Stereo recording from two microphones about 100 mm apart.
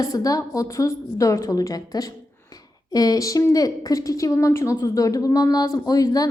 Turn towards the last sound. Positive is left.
turn(degrees=40)  # may be behind; listen again after turning